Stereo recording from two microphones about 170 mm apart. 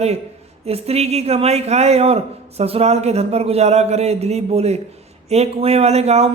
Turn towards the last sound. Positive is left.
turn(degrees=-40)  # may be behind; listen again after turning